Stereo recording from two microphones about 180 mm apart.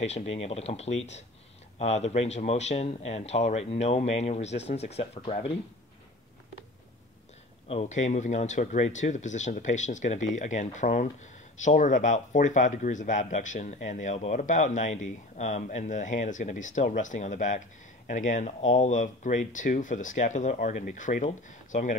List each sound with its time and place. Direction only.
0.0 s speech: 35° left (ahead or behind)
7.6 s speech: 35° left (ahead or behind)